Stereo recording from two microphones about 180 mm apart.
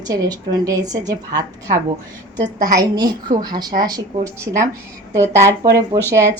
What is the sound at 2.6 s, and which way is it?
A woman's voice, 20° right (ahead or behind).